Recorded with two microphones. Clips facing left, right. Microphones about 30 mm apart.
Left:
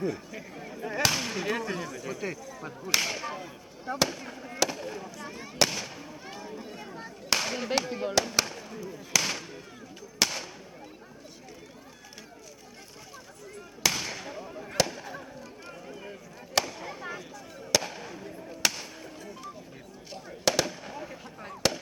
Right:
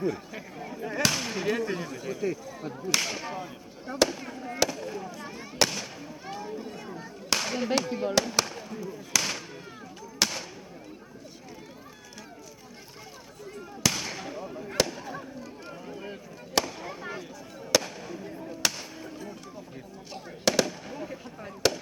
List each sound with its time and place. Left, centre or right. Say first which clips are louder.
0.0 s speech: right 2 dB; centre
2.5 s speech: right 3 dB; centre
2.8 s speech: left 1 dB; centre
4.7 s fireworks: right 1 dB; centre
7.3 s a sound: right 1 dB; centre
13.8 s a sound: even; centre
16.6 s fireworks: right 1 dB; centre
17.8 s fireworks: right 1 dB; centre
18.3 s music: left 1 dB; centre
20.4 s speech: right 2 dB; centre